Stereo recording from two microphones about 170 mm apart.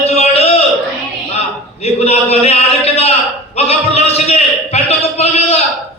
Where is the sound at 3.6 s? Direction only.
40° left (ahead or behind).